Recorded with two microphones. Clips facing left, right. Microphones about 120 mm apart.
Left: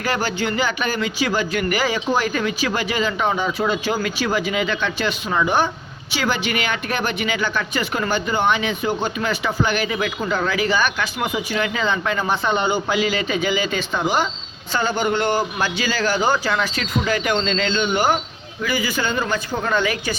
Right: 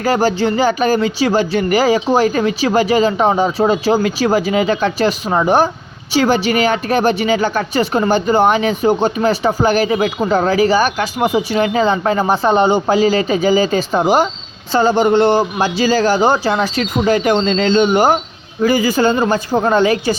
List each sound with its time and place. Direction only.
0.0 s speech: 35° right (ahead or behind)